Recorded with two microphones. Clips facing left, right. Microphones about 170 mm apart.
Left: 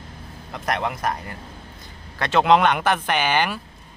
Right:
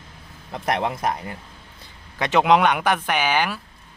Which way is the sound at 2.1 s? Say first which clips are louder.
Even; 15° right (ahead or behind).